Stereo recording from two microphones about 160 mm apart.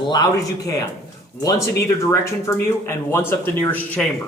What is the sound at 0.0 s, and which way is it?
Speech, 25° left (ahead or behind).